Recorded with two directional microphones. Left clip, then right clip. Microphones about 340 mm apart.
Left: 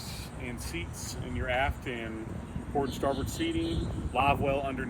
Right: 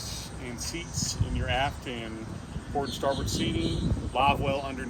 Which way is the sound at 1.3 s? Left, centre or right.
Centre.